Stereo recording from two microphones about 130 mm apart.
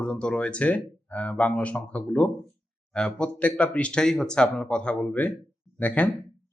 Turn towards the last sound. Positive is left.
turn(degrees=10)  # may be behind; listen again after turning